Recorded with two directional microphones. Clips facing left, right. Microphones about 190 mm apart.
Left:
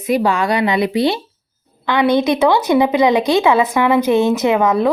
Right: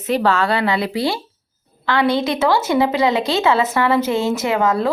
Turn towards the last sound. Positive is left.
turn(degrees=20)  # may be behind; listen again after turning